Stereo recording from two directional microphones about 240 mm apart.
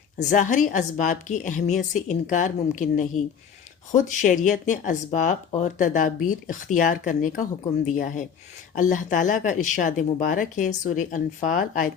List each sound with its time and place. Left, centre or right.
0.2 s speech: left